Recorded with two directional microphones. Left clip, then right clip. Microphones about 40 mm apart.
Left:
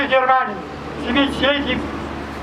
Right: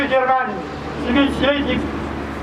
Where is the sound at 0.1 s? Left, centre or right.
Left.